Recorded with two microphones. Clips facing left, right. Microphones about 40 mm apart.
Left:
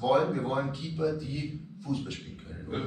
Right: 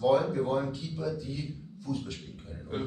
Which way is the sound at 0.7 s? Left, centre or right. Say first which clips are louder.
Left 4 dB; left.